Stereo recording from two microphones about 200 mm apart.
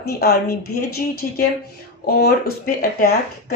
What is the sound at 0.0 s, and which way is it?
Speech, 50° left (ahead or behind).